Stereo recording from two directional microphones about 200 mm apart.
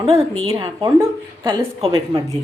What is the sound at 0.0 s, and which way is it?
A woman's voice, 25° right (ahead or behind).